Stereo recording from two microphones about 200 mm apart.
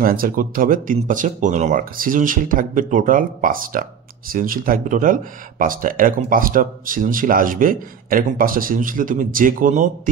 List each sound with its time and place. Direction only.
0.0 s speech: 45° right (ahead or behind)